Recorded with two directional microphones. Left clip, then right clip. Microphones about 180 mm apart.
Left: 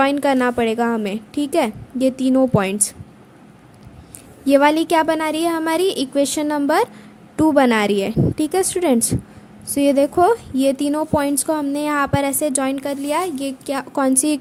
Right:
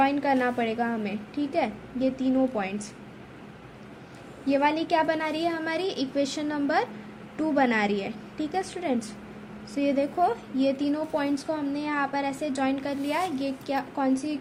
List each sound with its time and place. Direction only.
0.0 s speech: 55° left (ahead or behind)
4.4 s speech: 50° left (ahead or behind)